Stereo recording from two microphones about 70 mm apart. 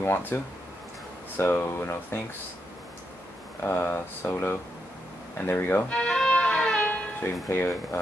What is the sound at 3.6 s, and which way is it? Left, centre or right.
Speech, left.